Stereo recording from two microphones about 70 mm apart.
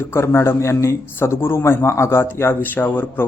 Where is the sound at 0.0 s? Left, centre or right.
Left.